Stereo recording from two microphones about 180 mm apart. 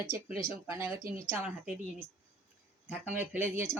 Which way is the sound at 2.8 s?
10° right (ahead or behind).